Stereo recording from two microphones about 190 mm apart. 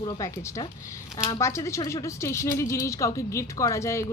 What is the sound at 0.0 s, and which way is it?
A woman's voice, 15° left (ahead or behind).